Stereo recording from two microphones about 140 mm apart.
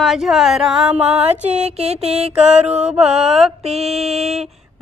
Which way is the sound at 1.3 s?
55° right (ahead or behind).